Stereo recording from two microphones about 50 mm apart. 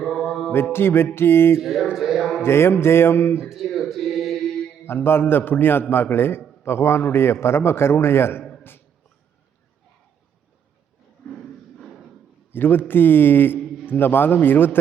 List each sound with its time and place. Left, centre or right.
0.0 s mantra: centre
0.5 s a man's voice: left
1.5 s a sound: centre
2.4 s a man's voice: left
3.5 s a sound: centre
4.8 s a man's voice: left
12.5 s a man's voice: left